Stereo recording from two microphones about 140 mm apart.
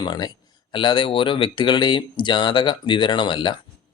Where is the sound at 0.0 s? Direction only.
30° left (ahead or behind).